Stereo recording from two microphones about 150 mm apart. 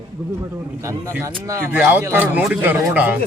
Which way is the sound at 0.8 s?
20° right (ahead or behind).